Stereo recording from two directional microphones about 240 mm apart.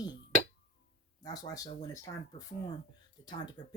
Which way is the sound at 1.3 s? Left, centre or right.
Centre.